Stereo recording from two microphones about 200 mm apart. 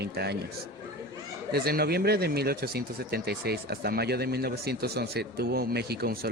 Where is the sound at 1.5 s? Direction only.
50° right (ahead or behind).